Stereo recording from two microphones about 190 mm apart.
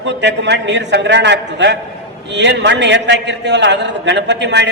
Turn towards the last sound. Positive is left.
turn(degrees=-65)  # may be behind; listen again after turning